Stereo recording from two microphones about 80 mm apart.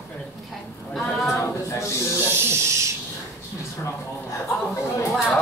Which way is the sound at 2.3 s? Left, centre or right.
Right.